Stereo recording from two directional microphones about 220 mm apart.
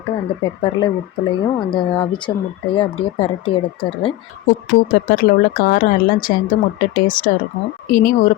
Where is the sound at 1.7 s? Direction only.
20° left (ahead or behind).